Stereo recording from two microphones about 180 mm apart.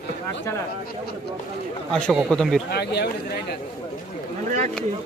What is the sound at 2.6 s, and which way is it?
Speech, 65° left (ahead or behind).